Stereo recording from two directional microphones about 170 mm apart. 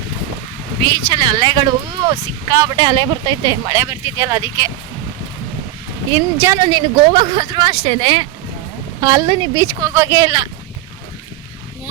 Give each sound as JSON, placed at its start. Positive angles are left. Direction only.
{"t": 0.8, "sound": "speech", "side_deg": -30}
{"t": 6.4, "sound": "speech", "side_deg": -15}
{"t": 6.7, "sound": "speech", "side_deg": -30}